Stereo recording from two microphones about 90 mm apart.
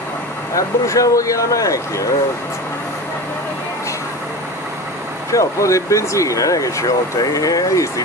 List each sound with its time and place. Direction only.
0.6 s speech: 40° left (ahead or behind)
5.3 s speech: 35° left (ahead or behind)